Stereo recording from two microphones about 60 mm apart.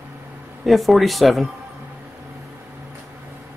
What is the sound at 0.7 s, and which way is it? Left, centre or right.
Speech, centre.